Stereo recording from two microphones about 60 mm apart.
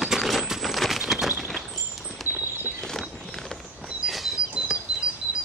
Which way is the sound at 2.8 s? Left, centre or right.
Centre.